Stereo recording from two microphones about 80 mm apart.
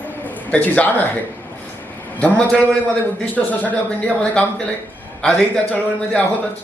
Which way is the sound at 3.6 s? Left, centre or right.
Centre.